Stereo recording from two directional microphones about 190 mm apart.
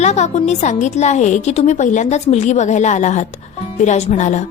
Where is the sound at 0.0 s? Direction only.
35° left (ahead or behind).